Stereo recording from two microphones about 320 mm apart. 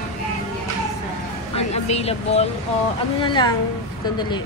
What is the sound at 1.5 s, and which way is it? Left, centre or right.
Speech, centre.